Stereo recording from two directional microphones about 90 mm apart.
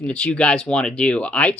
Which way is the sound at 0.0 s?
15° left (ahead or behind).